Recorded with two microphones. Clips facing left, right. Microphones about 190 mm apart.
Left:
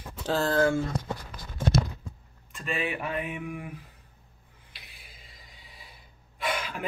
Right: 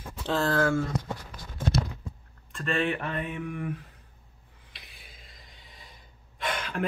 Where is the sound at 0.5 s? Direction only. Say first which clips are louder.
Left 2 dB; 25° left (ahead or behind).